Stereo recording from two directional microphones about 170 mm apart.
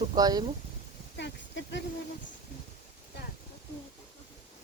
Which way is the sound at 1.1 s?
90° left.